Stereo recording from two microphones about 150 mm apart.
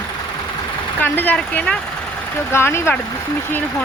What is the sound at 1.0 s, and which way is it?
Speech, 10° left (ahead or behind).